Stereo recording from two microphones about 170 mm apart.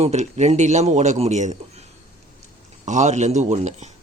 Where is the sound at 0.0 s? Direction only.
40° right (ahead or behind).